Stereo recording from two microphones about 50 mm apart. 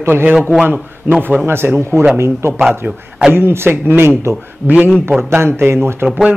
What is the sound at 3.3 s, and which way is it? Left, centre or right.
Speech, right.